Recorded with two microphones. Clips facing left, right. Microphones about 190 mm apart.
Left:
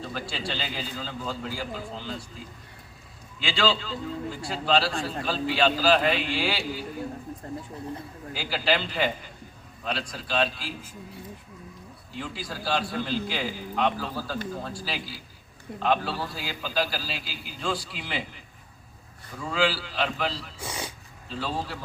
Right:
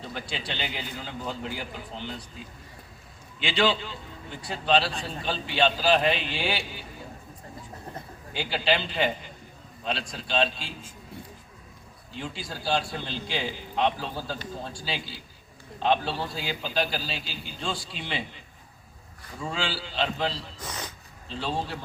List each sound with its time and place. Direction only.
0.1 s a man's voice: 20° right (ahead or behind)
3.3 s a man's voice: 20° right (ahead or behind)
8.3 s a man's voice: 25° right (ahead or behind)
12.1 s a man's voice: 25° right (ahead or behind)
19.4 s a man's voice: 25° right (ahead or behind)
20.6 s speech: 10° left (ahead or behind)
21.2 s a man's voice: 25° right (ahead or behind)